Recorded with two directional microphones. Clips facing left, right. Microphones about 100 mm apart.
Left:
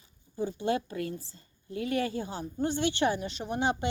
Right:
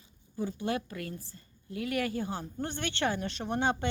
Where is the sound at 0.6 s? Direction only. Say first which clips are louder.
Left 6 dB; 25° left (ahead or behind).